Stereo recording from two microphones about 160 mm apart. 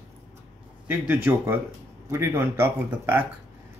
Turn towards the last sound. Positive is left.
turn(degrees=-15)  # may be behind; listen again after turning